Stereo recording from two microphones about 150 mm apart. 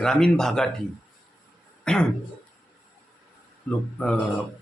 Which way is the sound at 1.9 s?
5° left (ahead or behind).